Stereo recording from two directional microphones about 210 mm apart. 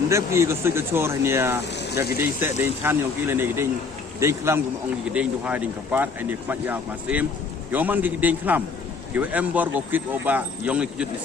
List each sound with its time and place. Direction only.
0.1 s speech: 15° right (ahead or behind)
1.7 s vehicle: 55° left (ahead or behind)
2.4 s speech: 10° right (ahead or behind)